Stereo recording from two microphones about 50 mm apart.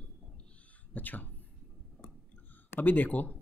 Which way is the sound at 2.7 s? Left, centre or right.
Left.